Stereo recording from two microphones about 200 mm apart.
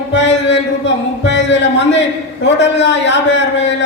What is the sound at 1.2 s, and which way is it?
A man's voice, 60° left (ahead or behind).